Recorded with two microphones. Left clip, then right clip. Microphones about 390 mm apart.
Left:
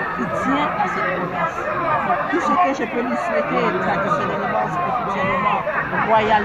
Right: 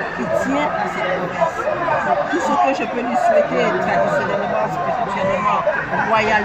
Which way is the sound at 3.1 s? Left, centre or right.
Right.